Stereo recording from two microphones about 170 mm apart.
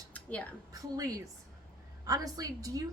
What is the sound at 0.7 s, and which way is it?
Speech, 20° right (ahead or behind).